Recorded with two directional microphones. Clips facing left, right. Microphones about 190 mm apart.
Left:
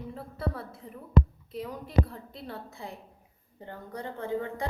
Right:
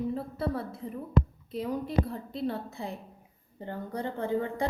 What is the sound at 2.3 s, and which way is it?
A woman's voice, 25° right (ahead or behind).